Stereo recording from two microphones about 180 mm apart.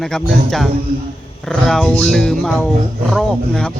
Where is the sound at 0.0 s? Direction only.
Centre (ahead or behind).